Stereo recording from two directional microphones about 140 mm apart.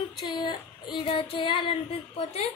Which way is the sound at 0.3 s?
30° left (ahead or behind).